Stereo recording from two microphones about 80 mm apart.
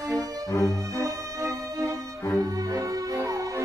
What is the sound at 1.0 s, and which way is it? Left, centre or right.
Music, right.